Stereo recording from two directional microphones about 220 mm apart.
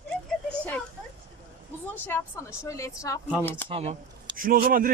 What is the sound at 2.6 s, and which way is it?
A woman's voice, 15° left (ahead or behind).